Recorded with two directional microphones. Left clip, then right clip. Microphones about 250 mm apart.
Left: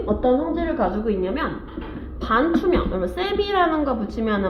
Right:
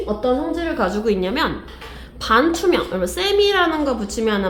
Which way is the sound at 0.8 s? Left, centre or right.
Right.